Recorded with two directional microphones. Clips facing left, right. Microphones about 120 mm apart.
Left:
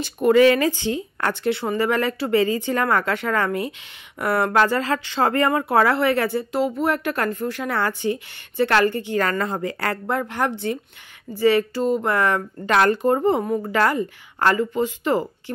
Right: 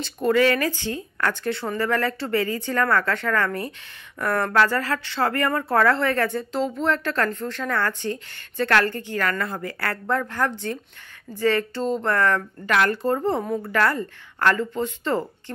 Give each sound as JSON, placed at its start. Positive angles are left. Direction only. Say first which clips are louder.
{"t": 0.3, "sound": "a woman's voice", "louder": "left 5 dB", "side_deg": 20}